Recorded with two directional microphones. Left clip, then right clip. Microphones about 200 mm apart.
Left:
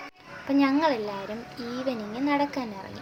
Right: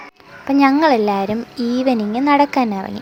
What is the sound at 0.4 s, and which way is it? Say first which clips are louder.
Speech: right 10 dB; 30° right (ahead or behind).